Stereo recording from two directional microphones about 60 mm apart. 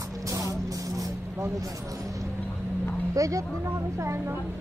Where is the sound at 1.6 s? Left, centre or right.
Right.